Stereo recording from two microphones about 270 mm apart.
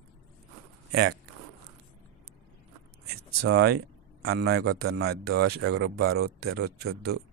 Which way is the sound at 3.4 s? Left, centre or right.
Right.